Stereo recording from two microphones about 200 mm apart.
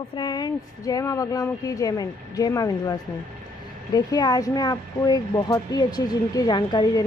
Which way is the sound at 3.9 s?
20° left (ahead or behind).